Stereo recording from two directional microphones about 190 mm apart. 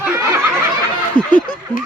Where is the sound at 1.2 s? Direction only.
25° right (ahead or behind).